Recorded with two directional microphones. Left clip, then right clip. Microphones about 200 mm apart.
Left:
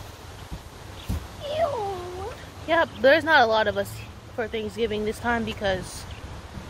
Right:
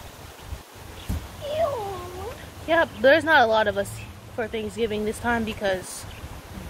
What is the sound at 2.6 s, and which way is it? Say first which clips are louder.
Speech: right 1 dB; 10° right (ahead or behind).